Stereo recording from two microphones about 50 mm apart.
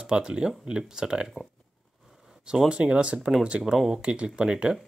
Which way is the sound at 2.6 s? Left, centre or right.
Right.